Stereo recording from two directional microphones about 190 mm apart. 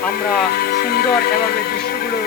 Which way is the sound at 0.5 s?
55° left (ahead or behind).